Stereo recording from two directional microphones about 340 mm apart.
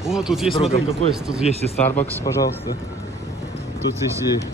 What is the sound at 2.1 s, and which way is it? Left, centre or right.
Speech, centre.